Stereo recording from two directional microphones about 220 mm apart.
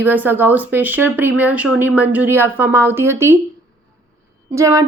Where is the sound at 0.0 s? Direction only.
10° right (ahead or behind).